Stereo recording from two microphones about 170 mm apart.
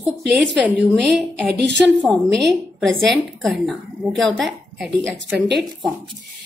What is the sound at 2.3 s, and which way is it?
Speech, 90° right.